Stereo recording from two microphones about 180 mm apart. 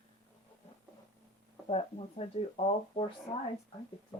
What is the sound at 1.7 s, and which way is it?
Speech, 35° left (ahead or behind).